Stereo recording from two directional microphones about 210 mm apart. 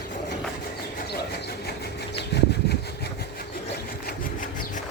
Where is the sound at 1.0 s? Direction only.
50° left (ahead or behind).